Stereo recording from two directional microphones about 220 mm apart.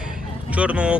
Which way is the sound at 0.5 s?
5° right (ahead or behind).